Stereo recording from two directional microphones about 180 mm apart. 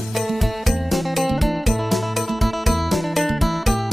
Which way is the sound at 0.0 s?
Centre (ahead or behind).